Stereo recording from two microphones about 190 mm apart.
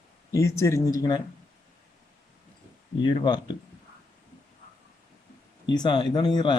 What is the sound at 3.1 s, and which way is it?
Speech, 25° left (ahead or behind).